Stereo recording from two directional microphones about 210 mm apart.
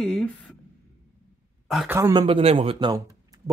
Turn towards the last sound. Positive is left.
turn(degrees=-20)  # may be behind; listen again after turning